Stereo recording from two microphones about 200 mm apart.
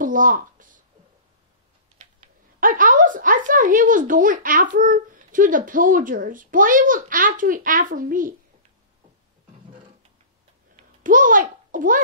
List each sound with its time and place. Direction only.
0.0 s a sound: 40° right (ahead or behind)
2.6 s speech: 40° right (ahead or behind)
11.0 s a child's voice: 40° right (ahead or behind)